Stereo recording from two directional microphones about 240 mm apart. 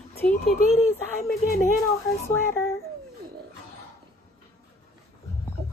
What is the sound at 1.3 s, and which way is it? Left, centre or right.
Speech, left.